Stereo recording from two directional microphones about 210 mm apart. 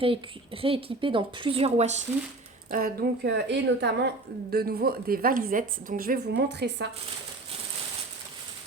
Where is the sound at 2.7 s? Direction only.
45° right (ahead or behind).